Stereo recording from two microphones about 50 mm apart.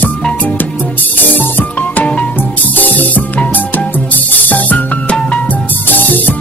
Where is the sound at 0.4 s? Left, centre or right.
Left.